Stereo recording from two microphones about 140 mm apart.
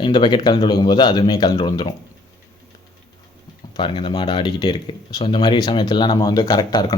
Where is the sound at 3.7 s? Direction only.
35° left (ahead or behind).